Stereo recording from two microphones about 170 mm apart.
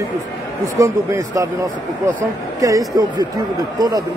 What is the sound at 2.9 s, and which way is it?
Speech, 20° right (ahead or behind).